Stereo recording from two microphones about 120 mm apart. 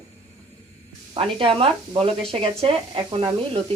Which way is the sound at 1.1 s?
50° right (ahead or behind).